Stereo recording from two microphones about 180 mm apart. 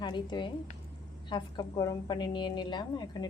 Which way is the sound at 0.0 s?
25° left (ahead or behind).